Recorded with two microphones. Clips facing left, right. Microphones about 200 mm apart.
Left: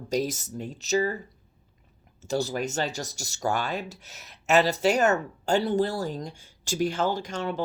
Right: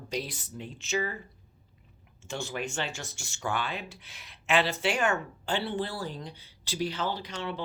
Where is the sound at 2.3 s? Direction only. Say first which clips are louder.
Left 7 dB; 40° left (ahead or behind).